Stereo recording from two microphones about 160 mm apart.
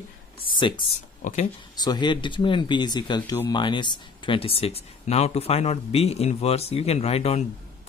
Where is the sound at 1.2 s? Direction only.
50° left (ahead or behind).